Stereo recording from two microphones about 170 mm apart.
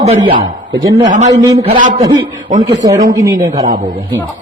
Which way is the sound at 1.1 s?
40° right (ahead or behind).